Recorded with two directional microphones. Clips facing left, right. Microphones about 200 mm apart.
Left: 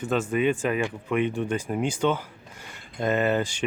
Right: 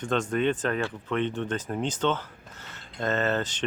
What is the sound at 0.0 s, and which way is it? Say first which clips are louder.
Speech: left 2 dB; 5° left (ahead or behind).